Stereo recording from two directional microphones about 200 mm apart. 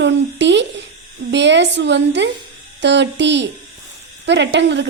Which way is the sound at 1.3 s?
60° right (ahead or behind).